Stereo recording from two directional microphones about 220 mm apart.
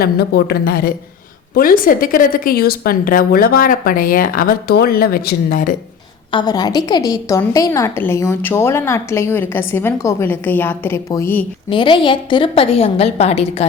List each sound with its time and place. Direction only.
0.0 s a woman's voice: 45° left (ahead or behind)
6.3 s a woman's voice: 20° left (ahead or behind)
11.7 s a woman's voice: 20° left (ahead or behind)